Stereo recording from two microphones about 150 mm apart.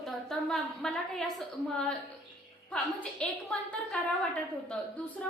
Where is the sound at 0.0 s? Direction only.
5° left (ahead or behind).